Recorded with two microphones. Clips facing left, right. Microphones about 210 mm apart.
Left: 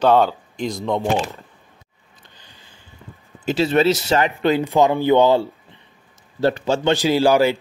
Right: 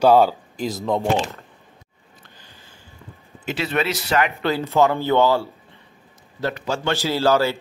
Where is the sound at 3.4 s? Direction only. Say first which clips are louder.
Left 7 dB; 30° left (ahead or behind).